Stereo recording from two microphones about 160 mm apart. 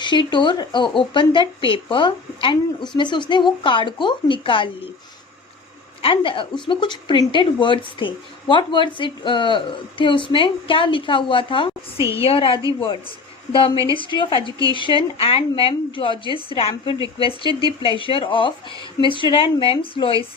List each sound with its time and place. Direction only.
0.0 s a woman's voice: 30° left (ahead or behind)
6.0 s a woman's voice: 35° left (ahead or behind)